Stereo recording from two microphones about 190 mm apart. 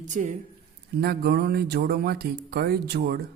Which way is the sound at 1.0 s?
55° right (ahead or behind).